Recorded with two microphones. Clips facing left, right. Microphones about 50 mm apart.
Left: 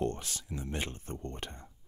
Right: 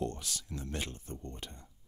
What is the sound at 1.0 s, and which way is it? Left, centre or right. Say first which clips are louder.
Speech: left 4 dB; left.